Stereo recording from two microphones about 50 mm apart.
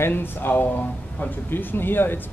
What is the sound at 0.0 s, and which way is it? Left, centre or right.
Speech, left.